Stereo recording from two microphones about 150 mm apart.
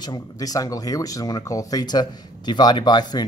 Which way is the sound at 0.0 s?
25° left (ahead or behind).